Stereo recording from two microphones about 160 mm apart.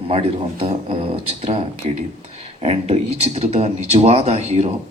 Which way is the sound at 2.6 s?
40° right (ahead or behind).